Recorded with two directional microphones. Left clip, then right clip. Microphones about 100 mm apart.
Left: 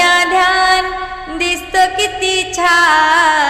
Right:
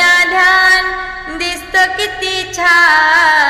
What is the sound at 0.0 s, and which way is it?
Music, 50° left (ahead or behind).